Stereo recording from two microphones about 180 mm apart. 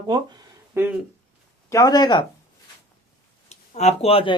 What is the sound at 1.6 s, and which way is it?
Speech, 20° left (ahead or behind).